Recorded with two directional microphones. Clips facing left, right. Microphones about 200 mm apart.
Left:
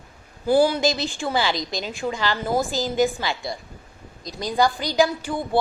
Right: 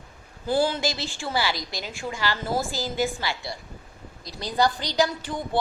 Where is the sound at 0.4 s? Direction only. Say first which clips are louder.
Left 6 dB; 10° left (ahead or behind).